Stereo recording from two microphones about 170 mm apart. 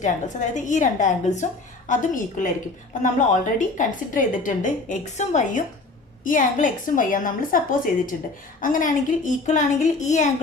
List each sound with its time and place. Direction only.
0.0 s a woman's voice: 45° left (ahead or behind)